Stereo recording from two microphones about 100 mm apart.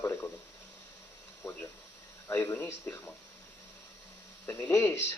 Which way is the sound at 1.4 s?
25° left (ahead or behind).